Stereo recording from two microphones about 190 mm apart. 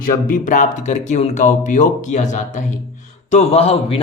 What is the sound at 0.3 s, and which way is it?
Speech, 45° left (ahead or behind).